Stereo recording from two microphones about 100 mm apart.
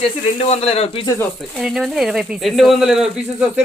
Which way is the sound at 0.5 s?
85° left.